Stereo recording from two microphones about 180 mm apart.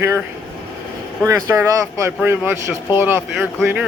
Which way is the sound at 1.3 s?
15° right (ahead or behind).